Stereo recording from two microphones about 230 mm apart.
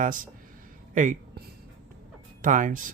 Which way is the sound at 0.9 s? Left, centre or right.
Right.